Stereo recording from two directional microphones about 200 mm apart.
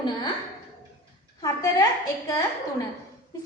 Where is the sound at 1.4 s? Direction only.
20° left (ahead or behind).